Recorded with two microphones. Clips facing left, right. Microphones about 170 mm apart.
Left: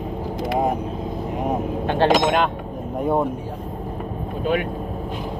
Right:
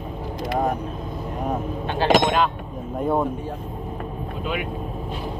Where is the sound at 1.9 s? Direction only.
60° left (ahead or behind).